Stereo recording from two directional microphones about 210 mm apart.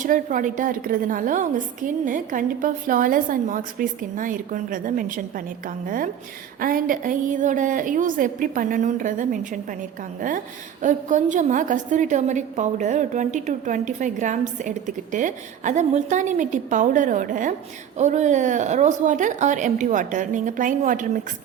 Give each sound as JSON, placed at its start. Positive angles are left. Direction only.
{"t": 0.0, "sound": "a woman's voice", "side_deg": -40}